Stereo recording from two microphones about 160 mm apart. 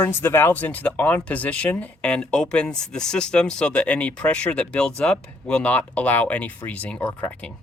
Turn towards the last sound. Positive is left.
turn(degrees=10)  # may be behind; listen again after turning